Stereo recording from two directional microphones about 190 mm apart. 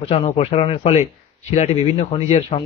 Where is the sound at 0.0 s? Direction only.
30° left (ahead or behind).